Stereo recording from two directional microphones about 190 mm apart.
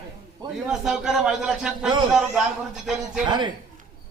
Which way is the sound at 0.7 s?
5° right (ahead or behind).